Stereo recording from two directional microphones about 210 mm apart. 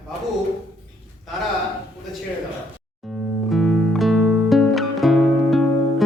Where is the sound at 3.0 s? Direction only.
Centre (ahead or behind).